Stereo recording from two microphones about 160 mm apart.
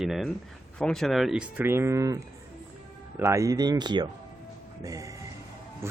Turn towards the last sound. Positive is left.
turn(degrees=-20)  # may be behind; listen again after turning